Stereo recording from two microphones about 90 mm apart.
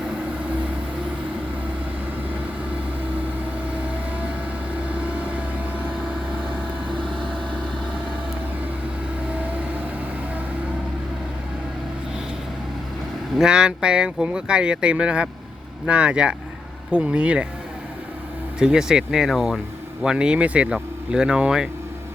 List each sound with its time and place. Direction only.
4.9 s vehicle: 15° right (ahead or behind)
13.3 s speech: 10° right (ahead or behind)
18.6 s speech: 5° right (ahead or behind)